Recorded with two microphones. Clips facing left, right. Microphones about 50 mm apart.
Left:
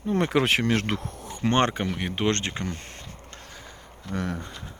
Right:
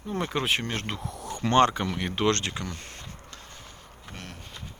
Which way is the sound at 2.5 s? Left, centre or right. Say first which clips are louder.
Left 3 dB; left.